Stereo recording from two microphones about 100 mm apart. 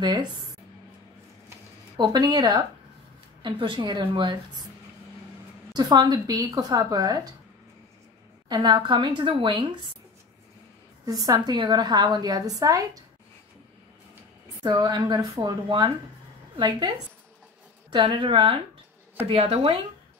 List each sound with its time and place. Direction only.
0.0 s a woman's voice: 45° right (ahead or behind)
2.0 s a woman's voice: 45° right (ahead or behind)
3.4 s a woman's voice: 55° right (ahead or behind)
5.7 s a woman's voice: 45° right (ahead or behind)
8.5 s a woman's voice: 45° right (ahead or behind)
11.1 s a woman's voice: 40° right (ahead or behind)
14.6 s a woman's voice: 45° right (ahead or behind)
17.9 s a woman's voice: 55° right (ahead or behind)
19.2 s a woman's voice: 70° right (ahead or behind)